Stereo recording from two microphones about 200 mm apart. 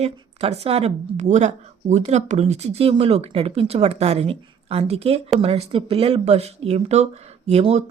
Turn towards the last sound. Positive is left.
turn(degrees=-35)  # may be behind; listen again after turning